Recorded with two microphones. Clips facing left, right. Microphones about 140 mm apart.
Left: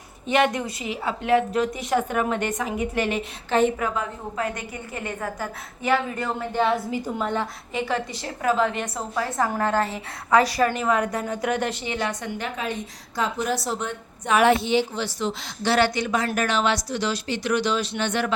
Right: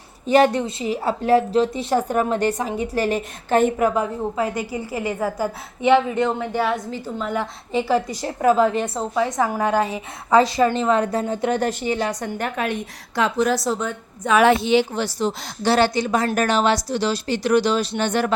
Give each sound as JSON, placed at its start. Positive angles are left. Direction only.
{"t": 0.3, "sound": "a woman's voice", "side_deg": -35}
{"t": 3.9, "sound": "a woman's voice", "side_deg": -30}
{"t": 5.0, "sound": "a woman's voice", "side_deg": -10}
{"t": 5.8, "sound": "a woman's voice", "side_deg": -25}
{"t": 6.6, "sound": "a woman's voice", "side_deg": 0}
{"t": 6.9, "sound": "a woman's voice", "side_deg": 10}
{"t": 8.1, "sound": "a woman's voice", "side_deg": -40}
{"t": 9.1, "sound": "a woman's voice", "side_deg": -10}
{"t": 11.7, "sound": "a woman's voice", "side_deg": -45}
{"t": 11.9, "sound": "a woman's voice", "side_deg": -35}
{"t": 12.4, "sound": "a woman's voice", "side_deg": -65}
{"t": 14.9, "sound": "a woman's voice", "side_deg": -40}